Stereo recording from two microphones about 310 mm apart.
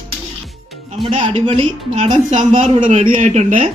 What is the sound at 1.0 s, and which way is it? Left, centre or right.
A woman's voice, centre.